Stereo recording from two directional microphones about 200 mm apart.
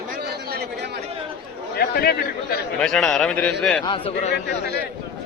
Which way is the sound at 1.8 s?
50° left (ahead or behind).